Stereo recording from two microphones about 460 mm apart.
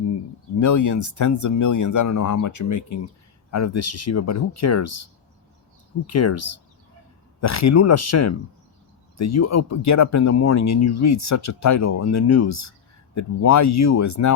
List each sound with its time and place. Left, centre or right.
0.6 s speech: left
6.1 s speech: left